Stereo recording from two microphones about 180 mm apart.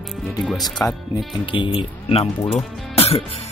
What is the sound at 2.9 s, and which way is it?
Music, 35° left (ahead or behind).